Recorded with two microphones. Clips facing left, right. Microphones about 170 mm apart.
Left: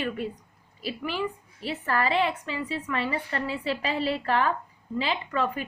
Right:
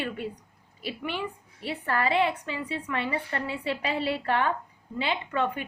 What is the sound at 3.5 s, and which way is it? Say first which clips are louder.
A woman's voice: even; 20° right (ahead or behind).